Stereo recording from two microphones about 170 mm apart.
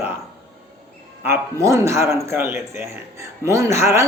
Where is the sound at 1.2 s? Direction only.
15° right (ahead or behind).